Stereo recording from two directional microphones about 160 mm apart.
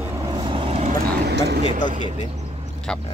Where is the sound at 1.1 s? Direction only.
90° right.